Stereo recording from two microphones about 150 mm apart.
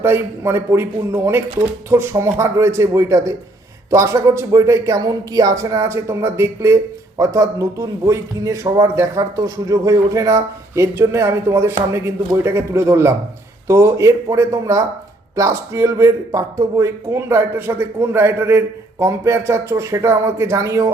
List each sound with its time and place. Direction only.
0.0 s a man's voice: 15° right (ahead or behind)